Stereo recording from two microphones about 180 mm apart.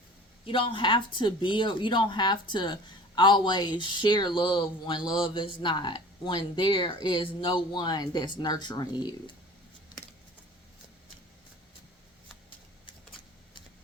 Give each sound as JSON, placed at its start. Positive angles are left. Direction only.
{"t": 0.4, "sound": "speech", "side_deg": 30}